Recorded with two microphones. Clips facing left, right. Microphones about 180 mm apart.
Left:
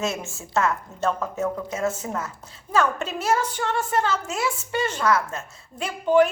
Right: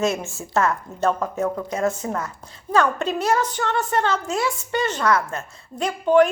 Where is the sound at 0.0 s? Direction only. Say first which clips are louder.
Right 5 dB; centre (ahead or behind).